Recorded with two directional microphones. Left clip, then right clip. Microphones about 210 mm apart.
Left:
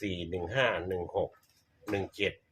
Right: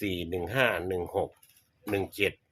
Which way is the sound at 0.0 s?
45° right (ahead or behind).